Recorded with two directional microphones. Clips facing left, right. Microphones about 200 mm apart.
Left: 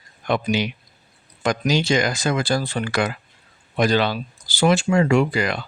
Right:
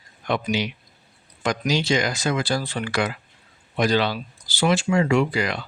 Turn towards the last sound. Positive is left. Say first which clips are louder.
# left 2 dB
turn(degrees=50)  # may be behind; listen again after turning